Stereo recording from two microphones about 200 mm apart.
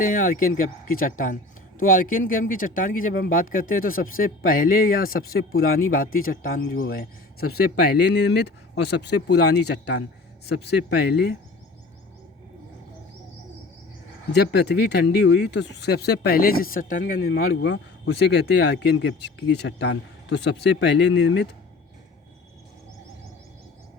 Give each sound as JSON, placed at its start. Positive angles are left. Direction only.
{"t": 0.0, "sound": "speech", "side_deg": 45}
{"t": 14.3, "sound": "speech", "side_deg": 55}
{"t": 17.3, "sound": "speech", "side_deg": 55}